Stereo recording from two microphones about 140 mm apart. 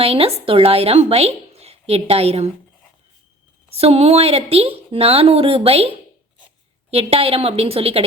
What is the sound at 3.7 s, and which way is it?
A woman's voice, 45° right (ahead or behind).